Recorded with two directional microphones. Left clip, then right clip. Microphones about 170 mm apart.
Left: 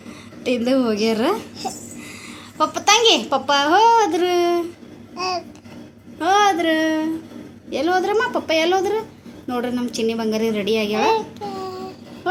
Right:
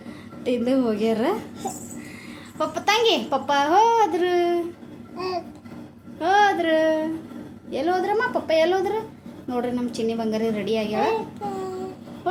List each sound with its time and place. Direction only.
0.4 s speech: 20° left (ahead or behind)
2.6 s speech: 20° left (ahead or behind)
5.1 s babbling: 5° right (ahead or behind)
6.1 s a woman's voice: 20° left (ahead or behind)
10.9 s a sound: 10° right (ahead or behind)